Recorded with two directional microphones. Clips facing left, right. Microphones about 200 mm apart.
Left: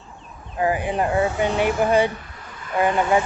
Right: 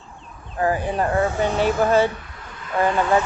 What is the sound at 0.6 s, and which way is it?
Speech, 15° left (ahead or behind).